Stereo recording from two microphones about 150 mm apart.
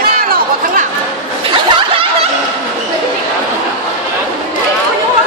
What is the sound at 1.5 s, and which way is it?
Snicker, 30° right (ahead or behind).